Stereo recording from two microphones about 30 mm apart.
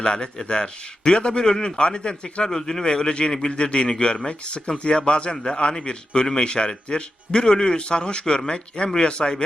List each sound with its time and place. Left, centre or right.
0.0 s speech: left
2.5 s a man's voice: centre
2.8 s a man's voice: left